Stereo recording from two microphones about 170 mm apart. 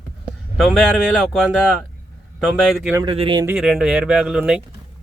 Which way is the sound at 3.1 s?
30° right (ahead or behind).